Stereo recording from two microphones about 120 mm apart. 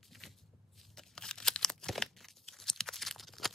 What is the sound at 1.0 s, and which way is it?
Tearing, 5° left (ahead or behind).